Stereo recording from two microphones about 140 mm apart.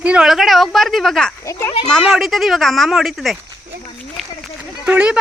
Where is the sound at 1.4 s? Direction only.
20° left (ahead or behind).